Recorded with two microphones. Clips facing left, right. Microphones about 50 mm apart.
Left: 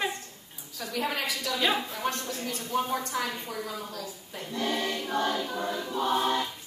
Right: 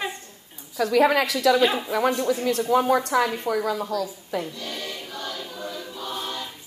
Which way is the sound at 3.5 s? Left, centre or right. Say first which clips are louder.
Right 11 dB; right.